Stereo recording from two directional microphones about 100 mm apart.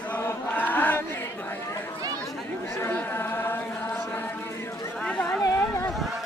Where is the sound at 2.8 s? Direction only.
20° left (ahead or behind).